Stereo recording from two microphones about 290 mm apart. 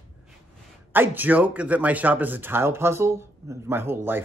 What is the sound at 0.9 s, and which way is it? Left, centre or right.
Speech, centre.